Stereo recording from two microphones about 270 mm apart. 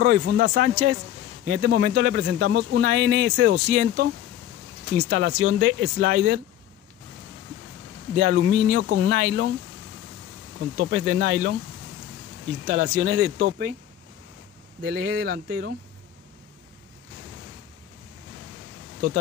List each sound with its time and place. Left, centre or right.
0.0 s speech: right
8.2 s speech: right
10.8 s speech: right
12.6 s speech: right
14.8 s speech: right